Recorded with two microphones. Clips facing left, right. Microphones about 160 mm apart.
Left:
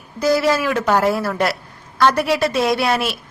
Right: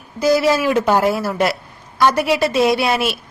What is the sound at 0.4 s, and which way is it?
Speech, 25° right (ahead or behind).